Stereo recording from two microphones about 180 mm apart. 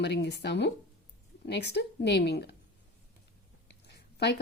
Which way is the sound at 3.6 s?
65° left (ahead or behind).